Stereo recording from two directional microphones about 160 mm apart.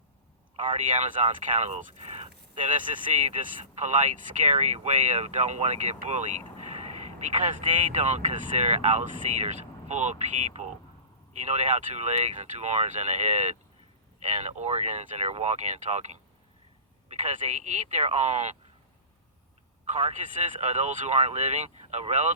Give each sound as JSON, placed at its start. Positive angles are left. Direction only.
{"t": 0.5, "sound": "speech", "side_deg": -50}
{"t": 19.9, "sound": "speech", "side_deg": -45}